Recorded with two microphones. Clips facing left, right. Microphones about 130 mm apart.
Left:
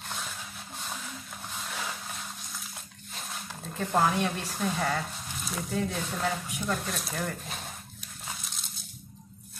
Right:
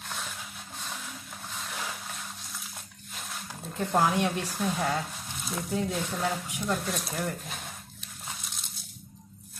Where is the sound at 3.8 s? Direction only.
10° right (ahead or behind).